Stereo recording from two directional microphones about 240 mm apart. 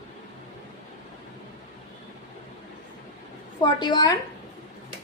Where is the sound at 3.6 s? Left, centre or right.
Centre.